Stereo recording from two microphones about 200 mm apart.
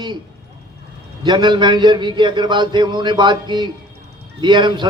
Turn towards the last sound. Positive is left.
turn(degrees=-20)  # may be behind; listen again after turning